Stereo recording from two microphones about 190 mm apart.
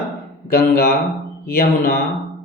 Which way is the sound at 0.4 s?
55° left (ahead or behind).